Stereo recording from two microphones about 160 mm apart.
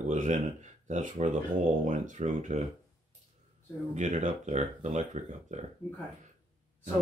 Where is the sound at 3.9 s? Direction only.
50° right (ahead or behind).